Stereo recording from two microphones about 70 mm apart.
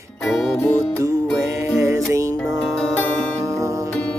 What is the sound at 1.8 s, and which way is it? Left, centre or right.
Music, right.